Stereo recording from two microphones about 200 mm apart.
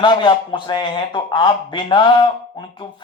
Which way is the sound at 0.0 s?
25° left (ahead or behind).